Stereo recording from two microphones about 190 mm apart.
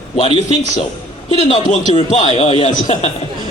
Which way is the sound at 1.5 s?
35° left (ahead or behind).